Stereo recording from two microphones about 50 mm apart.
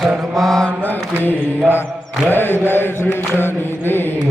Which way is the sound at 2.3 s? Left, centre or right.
Left.